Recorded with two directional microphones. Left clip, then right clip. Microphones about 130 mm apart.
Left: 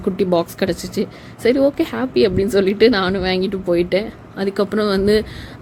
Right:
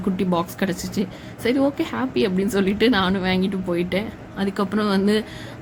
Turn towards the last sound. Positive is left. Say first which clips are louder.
# left 5 dB
turn(degrees=20)  # may be behind; listen again after turning